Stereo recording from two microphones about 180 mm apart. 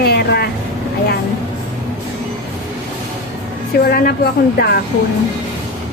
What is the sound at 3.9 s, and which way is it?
Speech, 60° left (ahead or behind).